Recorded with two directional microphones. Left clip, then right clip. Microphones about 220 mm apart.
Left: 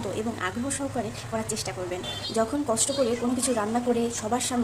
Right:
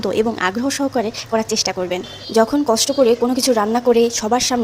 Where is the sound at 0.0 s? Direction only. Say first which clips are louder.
Right 12 dB; 40° right (ahead or behind).